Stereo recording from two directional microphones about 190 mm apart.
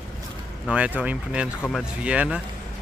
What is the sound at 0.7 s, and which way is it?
Speech, 5° right (ahead or behind).